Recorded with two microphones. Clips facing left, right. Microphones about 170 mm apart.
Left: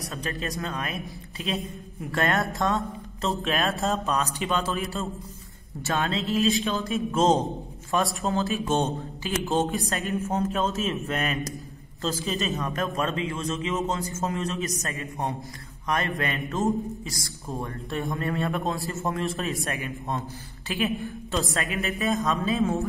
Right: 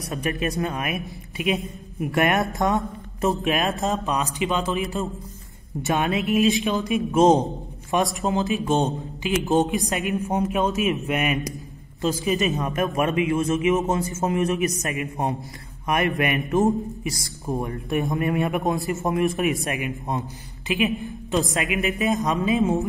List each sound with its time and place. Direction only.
0.1 s a man's voice: 20° right (ahead or behind)